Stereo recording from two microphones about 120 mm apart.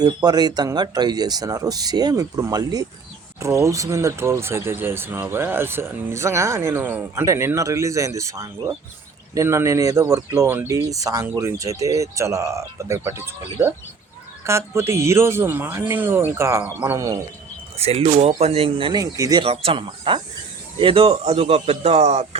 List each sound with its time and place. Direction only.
0.0 s speech: 35° right (ahead or behind)
17.7 s speech: 55° right (ahead or behind)
18.9 s speech: 30° right (ahead or behind)
19.4 s speech: 50° right (ahead or behind); by 22.4 s 65° right (ahead or behind)